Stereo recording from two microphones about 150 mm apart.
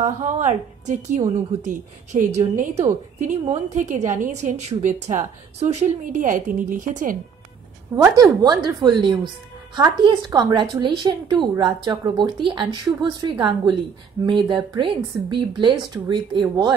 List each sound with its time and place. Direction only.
0.0 s a woman's voice: 50° right (ahead or behind)
7.9 s a woman's voice: 25° right (ahead or behind)